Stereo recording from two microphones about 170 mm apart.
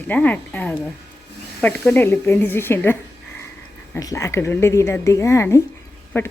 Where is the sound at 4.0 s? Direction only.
20° left (ahead or behind).